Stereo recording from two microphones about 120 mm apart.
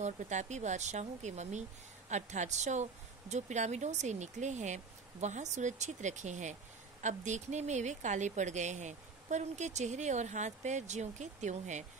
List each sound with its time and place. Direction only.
0.0 s speech: 80° right